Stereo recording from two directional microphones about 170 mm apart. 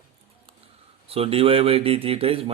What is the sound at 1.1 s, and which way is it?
A man's voice, 35° right (ahead or behind).